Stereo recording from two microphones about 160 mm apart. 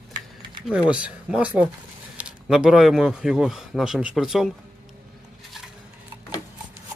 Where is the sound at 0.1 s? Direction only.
30° right (ahead or behind).